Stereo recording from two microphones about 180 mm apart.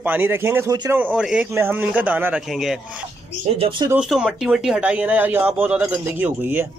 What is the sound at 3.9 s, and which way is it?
Speech, 5° right (ahead or behind).